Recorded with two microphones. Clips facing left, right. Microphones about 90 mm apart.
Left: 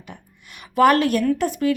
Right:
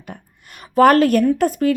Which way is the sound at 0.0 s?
45° right (ahead or behind).